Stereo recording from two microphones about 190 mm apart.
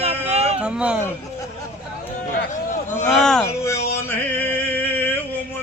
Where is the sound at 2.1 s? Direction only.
40° left (ahead or behind).